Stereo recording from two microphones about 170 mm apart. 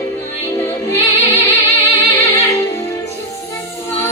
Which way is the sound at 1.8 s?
35° left (ahead or behind).